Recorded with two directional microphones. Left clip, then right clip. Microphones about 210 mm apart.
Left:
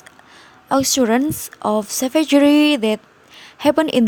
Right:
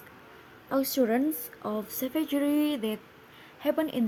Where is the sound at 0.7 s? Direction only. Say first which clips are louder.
Left 10 dB; 50° left (ahead or behind).